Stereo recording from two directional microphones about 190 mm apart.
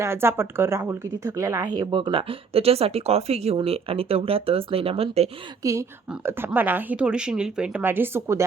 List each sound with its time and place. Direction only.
0.0 s speech: 15° right (ahead or behind); by 5.3 s 30° right (ahead or behind)
5.6 s a woman's voice: 15° right (ahead or behind)